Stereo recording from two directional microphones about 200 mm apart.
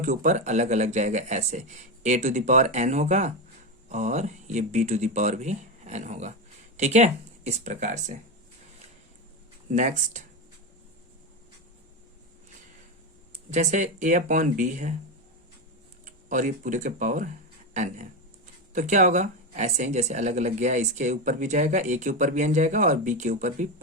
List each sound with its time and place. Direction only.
0.0 s speech: 40° right (ahead or behind)
9.6 s speech: 40° right (ahead or behind)
13.5 s speech: 35° right (ahead or behind)
16.0 s speech: 40° right (ahead or behind)
18.7 s speech: 40° right (ahead or behind)